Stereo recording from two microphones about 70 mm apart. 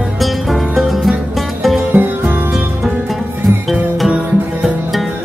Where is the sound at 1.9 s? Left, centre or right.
Right.